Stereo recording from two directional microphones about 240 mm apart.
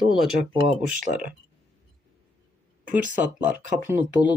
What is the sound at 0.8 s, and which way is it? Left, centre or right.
Speech, right.